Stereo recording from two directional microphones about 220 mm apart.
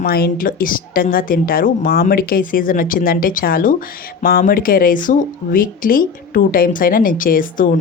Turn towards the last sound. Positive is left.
turn(degrees=40)  # may be behind; listen again after turning